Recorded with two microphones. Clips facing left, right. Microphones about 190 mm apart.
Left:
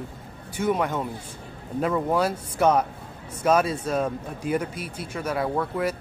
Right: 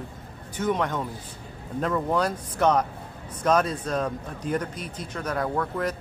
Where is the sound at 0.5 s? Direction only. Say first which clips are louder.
Left 1 dB; 10° left (ahead or behind).